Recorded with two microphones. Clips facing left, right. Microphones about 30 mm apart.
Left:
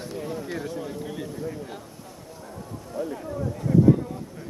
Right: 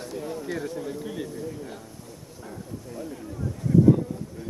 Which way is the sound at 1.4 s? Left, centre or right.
Centre.